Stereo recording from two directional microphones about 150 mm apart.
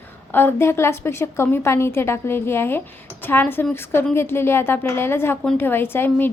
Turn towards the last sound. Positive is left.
turn(degrees=15)  # may be behind; listen again after turning